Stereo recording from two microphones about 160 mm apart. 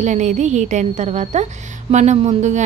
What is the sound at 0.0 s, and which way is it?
A woman's voice, 45° right (ahead or behind).